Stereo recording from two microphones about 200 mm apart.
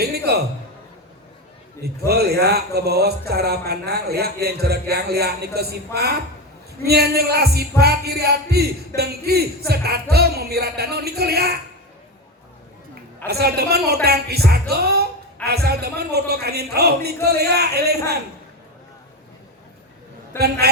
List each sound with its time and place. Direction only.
0.0 s a sound: 55° right (ahead or behind)
1.8 s a man's voice: 50° right (ahead or behind)
13.2 s a man's voice: 50° right (ahead or behind)
20.3 s a man's voice: 10° left (ahead or behind)